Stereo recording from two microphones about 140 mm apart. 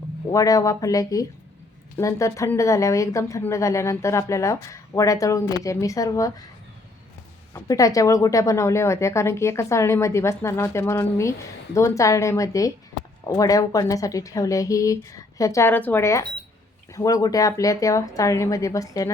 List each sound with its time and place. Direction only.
0.3 s a woman's voice: 25° left (ahead or behind)
7.5 s a woman's voice: 25° left (ahead or behind)